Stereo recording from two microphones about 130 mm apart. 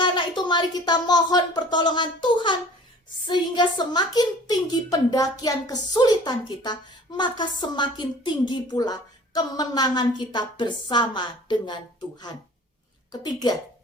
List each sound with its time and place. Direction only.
0.0 s a woman's voice: 35° left (ahead or behind)